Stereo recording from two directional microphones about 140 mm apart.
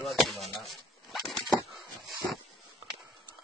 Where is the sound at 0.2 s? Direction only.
Centre (ahead or behind).